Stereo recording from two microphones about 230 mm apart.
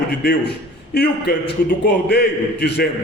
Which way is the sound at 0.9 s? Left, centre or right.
Left.